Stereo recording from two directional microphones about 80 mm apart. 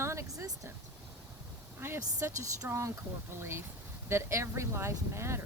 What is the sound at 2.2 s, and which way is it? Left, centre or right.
Speech, right.